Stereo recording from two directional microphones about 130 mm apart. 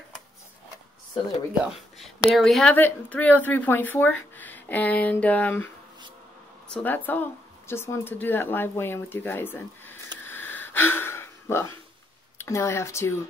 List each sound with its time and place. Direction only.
1.6 s a woman's voice: 5° right (ahead or behind)
2.7 s speech: 15° left (ahead or behind)
6.7 s speech: 15° left (ahead or behind)
10.2 s gasp: 15° left (ahead or behind)
12.4 s speech: 20° left (ahead or behind)